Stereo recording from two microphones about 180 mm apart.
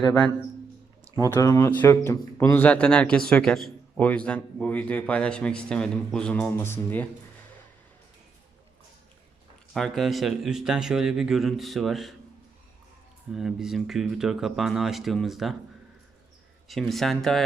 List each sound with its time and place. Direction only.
1.3 s speech: 15° left (ahead or behind)
9.7 s a man's voice: centre (ahead or behind)
13.3 s a man's voice: 5° right (ahead or behind)
16.6 s a man's voice: centre (ahead or behind)